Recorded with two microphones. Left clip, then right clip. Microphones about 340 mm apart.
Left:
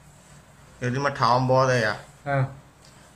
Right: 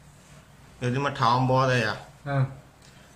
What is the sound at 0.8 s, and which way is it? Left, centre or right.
Speech, centre.